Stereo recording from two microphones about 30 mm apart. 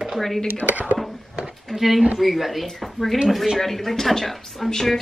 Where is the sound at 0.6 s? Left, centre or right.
Left.